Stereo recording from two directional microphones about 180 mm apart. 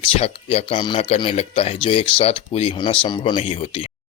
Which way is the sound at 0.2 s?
35° left (ahead or behind).